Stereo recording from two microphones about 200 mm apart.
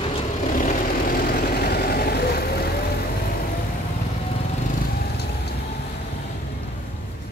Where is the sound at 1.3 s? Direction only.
50° left (ahead or behind).